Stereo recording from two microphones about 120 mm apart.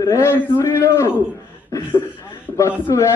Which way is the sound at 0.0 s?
25° left (ahead or behind).